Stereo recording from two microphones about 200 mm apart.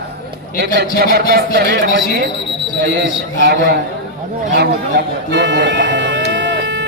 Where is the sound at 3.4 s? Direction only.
55° right (ahead or behind).